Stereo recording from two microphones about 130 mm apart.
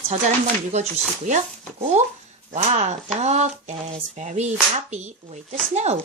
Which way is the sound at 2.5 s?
60° right (ahead or behind).